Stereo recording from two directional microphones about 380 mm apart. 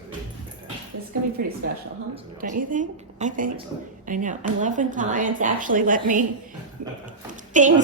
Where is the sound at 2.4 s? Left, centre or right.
Right.